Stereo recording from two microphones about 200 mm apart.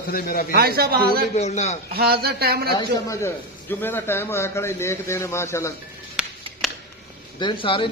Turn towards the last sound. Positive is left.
turn(degrees=25)  # may be behind; listen again after turning